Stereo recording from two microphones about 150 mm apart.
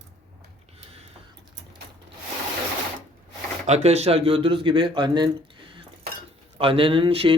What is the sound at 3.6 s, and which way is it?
Speech, 45° right (ahead or behind).